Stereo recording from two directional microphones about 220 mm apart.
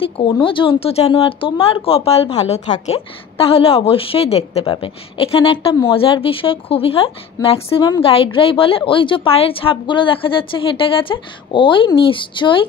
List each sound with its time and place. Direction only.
0.0 s a woman's voice: 25° left (ahead or behind)